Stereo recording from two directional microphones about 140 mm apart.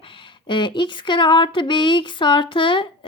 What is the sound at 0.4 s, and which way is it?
Speech, 35° left (ahead or behind).